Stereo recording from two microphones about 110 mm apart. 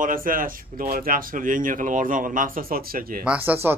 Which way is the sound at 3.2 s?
10° right (ahead or behind).